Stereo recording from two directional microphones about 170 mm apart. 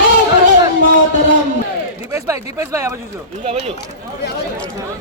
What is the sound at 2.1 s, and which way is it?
Speech, 20° right (ahead or behind).